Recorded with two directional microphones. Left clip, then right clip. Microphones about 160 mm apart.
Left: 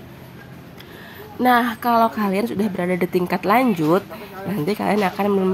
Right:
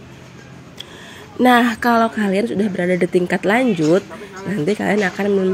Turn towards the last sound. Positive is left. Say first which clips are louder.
# right 1 dB
turn(degrees=0)  # may be behind; listen again after turning